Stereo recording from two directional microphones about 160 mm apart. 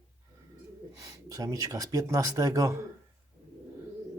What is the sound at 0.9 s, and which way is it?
Speech, 20° right (ahead or behind).